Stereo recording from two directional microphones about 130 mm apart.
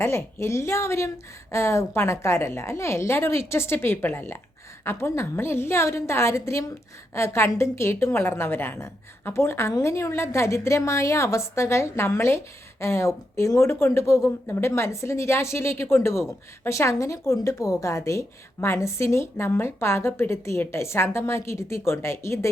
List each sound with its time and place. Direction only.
0.0 s a woman's voice: 20° left (ahead or behind)